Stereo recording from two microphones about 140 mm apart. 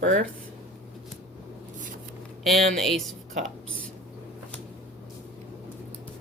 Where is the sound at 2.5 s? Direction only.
Centre (ahead or behind).